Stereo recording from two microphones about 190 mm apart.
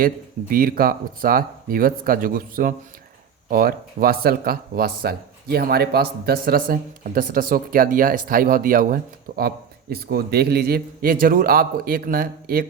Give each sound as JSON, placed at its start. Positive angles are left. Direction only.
{"t": 0.5, "sound": "speech", "side_deg": -50}